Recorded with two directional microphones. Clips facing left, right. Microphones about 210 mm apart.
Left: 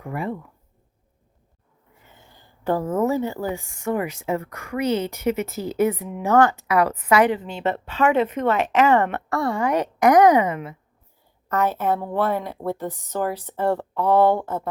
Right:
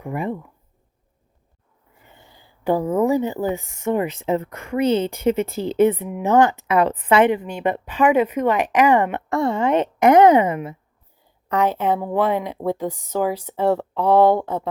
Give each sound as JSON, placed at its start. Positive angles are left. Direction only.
{"t": 0.0, "sound": "speech", "side_deg": -15}
{"t": 2.2, "sound": "speech", "side_deg": -10}
{"t": 6.1, "sound": "speech", "side_deg": -15}
{"t": 11.5, "sound": "speech", "side_deg": -15}